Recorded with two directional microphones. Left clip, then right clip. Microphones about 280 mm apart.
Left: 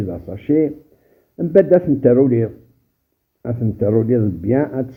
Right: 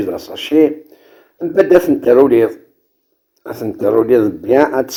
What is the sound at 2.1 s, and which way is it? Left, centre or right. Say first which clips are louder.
Speech: right 6 dB; centre.